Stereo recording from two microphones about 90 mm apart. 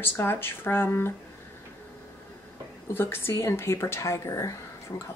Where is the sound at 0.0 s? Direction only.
25° left (ahead or behind).